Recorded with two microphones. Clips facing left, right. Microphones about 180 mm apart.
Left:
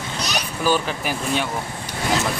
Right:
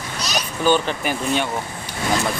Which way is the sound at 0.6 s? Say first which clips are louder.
Right 3 dB; 5° left (ahead or behind).